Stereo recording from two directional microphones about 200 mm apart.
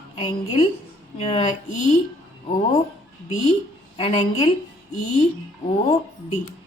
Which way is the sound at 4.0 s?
30° left (ahead or behind).